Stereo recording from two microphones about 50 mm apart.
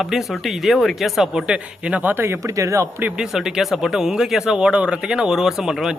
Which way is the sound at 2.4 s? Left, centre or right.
Right.